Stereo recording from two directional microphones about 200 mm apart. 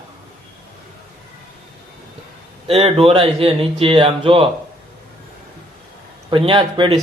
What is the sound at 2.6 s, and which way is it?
Speech, 30° right (ahead or behind).